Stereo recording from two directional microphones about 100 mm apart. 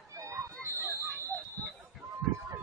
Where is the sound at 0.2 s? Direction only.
30° right (ahead or behind).